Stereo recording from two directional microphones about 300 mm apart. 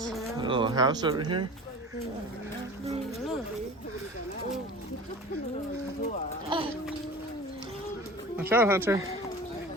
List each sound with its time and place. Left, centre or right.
0.0 s insect: centre
0.3 s speech: centre
6.5 s speech: centre
8.4 s speech: centre